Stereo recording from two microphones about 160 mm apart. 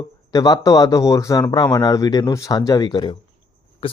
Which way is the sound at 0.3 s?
25° left (ahead or behind).